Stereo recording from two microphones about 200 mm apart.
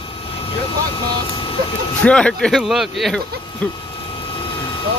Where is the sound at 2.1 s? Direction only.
5° left (ahead or behind).